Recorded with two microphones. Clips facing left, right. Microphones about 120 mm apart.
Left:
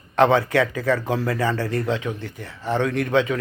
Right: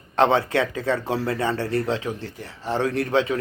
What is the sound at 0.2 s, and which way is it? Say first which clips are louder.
Speech: left 2 dB; 30° right (ahead or behind).